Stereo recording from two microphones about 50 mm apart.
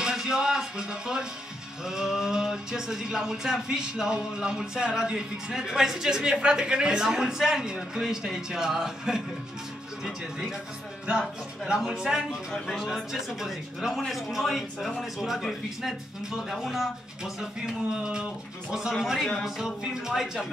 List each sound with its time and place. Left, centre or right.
0.0 s a sound: centre
1.9 s speech: centre
11.1 s speech: centre
18.7 s speech: centre